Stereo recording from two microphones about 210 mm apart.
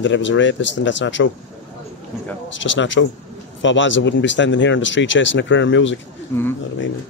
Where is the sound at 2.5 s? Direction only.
60° left (ahead or behind).